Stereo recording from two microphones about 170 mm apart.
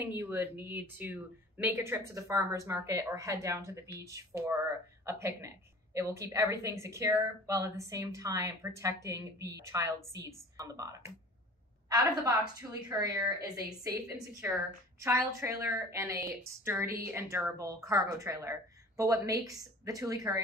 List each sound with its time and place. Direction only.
0.0 s a woman's voice: 10° right (ahead or behind)